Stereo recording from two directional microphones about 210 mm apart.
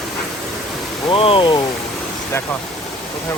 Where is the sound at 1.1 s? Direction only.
25° left (ahead or behind).